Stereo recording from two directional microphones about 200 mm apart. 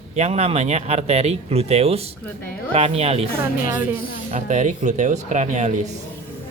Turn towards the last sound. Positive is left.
turn(degrees=-35)  # may be behind; listen again after turning